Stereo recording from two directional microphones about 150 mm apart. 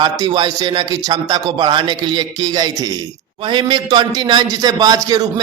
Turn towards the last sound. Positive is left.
turn(degrees=-25)  # may be behind; listen again after turning